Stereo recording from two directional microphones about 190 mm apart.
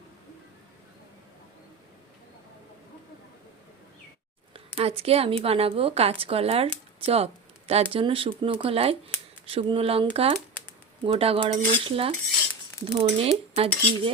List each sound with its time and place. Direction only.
4.5 s speech: 30° right (ahead or behind)
12.8 s cutlery: 30° right (ahead or behind)